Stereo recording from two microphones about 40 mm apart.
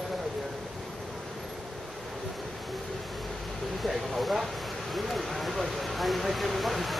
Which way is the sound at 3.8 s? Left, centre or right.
Centre.